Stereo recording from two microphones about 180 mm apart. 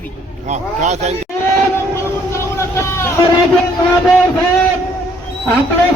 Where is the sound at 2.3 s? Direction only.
15° left (ahead or behind).